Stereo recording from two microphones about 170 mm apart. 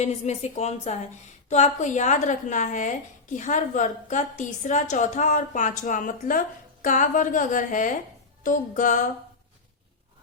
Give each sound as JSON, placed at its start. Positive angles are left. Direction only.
{"t": 0.0, "sound": "a woman's voice", "side_deg": 40}